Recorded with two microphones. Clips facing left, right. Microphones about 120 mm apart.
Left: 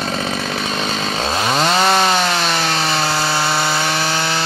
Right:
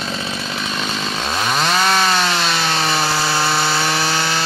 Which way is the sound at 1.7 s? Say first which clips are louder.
Left 2 dB; 25° left (ahead or behind).